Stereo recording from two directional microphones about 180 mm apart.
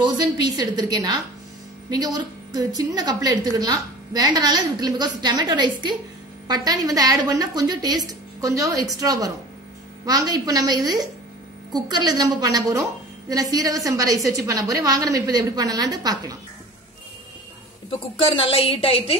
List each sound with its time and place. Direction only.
0.0 s a woman's voice: 25° right (ahead or behind)
18.1 s a woman's voice: 30° left (ahead or behind)